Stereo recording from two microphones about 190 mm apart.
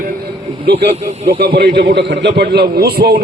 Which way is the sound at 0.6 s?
60° right (ahead or behind).